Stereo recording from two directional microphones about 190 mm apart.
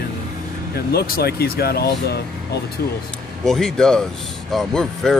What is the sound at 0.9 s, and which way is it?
Speech, 55° left (ahead or behind).